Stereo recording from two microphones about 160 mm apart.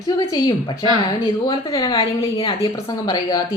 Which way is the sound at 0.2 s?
25° left (ahead or behind).